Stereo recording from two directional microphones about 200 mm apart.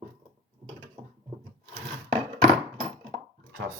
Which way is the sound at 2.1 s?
25° right (ahead or behind).